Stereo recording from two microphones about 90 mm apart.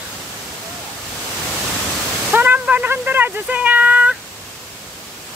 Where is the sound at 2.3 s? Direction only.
20° right (ahead or behind).